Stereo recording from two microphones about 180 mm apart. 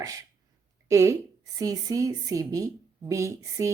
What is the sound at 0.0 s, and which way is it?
A woman's voice, 20° right (ahead or behind).